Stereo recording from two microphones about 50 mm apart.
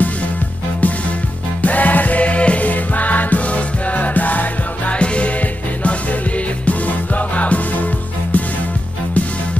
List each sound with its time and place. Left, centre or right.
1.6 s music: left
4.9 s music: left
6.6 s music: left